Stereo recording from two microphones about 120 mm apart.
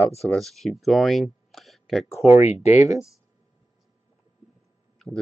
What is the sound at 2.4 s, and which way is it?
Speech, 70° left (ahead or behind).